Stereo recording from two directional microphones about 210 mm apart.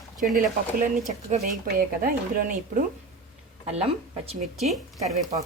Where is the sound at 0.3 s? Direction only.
40° right (ahead or behind).